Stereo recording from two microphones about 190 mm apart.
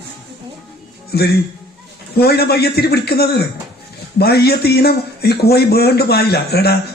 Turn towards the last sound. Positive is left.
turn(degrees=55)  # may be behind; listen again after turning